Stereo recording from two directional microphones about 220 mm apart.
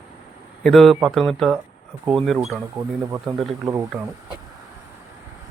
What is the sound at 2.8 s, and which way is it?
Speech, 15° right (ahead or behind).